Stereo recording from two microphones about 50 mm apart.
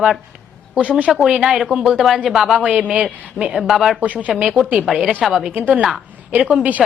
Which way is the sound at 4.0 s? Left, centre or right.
Right.